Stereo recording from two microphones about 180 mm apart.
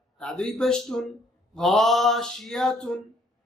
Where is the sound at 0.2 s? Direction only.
5° left (ahead or behind).